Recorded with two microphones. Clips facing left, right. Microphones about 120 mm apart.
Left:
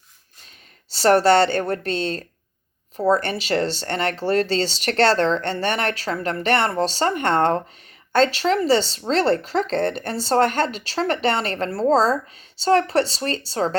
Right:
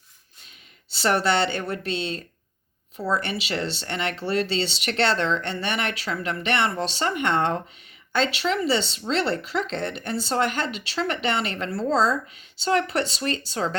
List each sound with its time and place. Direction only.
0.9 s speech: 40° left (ahead or behind)